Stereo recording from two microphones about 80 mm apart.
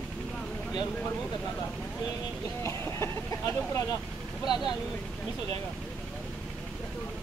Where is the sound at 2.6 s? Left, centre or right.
Left.